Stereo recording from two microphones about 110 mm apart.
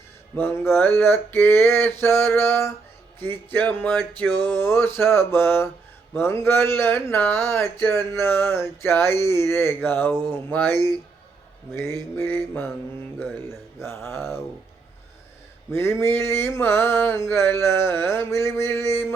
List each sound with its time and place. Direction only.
0.3 s speech: 20° left (ahead or behind)
13.8 s speech: 20° left (ahead or behind)
15.7 s speech: 25° left (ahead or behind)